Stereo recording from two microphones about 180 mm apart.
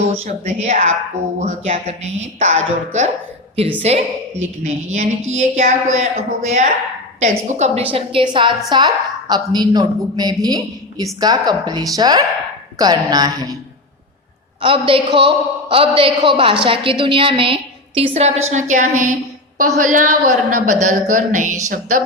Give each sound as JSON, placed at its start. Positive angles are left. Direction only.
{"t": 0.1, "sound": "a woman's voice", "side_deg": -35}
{"t": 14.6, "sound": "a woman's voice", "side_deg": -30}